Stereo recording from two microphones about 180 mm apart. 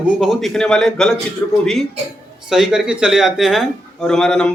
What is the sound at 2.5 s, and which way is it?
Speech, centre (ahead or behind).